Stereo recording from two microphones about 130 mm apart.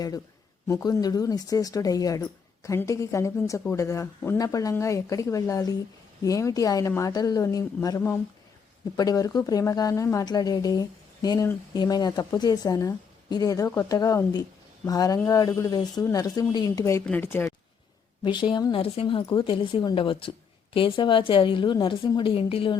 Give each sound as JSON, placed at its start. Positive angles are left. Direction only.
{"t": 0.7, "sound": "a woman's voice", "side_deg": 25}
{"t": 17.1, "sound": "speech", "side_deg": 15}
{"t": 18.2, "sound": "a woman's voice", "side_deg": 35}